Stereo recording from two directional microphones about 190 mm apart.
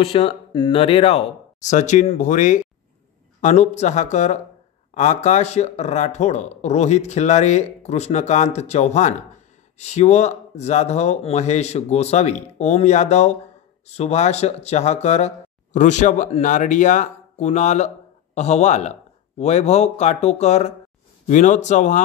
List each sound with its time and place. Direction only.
0.0 s speech: 30° left (ahead or behind)